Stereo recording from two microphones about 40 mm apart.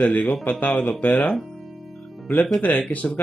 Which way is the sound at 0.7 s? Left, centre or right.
Centre.